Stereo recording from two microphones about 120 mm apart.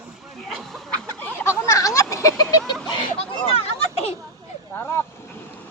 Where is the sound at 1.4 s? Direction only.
20° left (ahead or behind).